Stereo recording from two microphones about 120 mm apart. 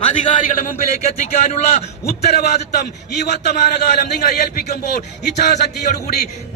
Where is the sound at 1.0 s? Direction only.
80° left.